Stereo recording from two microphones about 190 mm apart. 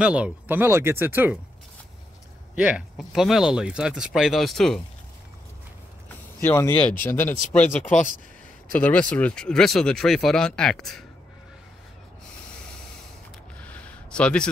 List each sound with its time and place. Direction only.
0.0 s speech: 5° right (ahead or behind)
2.5 s speech: 5° right (ahead or behind)
6.4 s speech: 15° left (ahead or behind)
7.6 s speech: 40° left (ahead or behind)
8.7 s speech: 10° left (ahead or behind)
13.6 s a sound: 5° left (ahead or behind)